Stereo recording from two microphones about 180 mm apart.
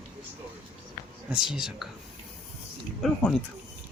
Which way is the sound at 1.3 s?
5° right (ahead or behind).